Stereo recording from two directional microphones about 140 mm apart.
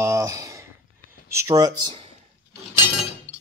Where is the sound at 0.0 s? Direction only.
20° right (ahead or behind).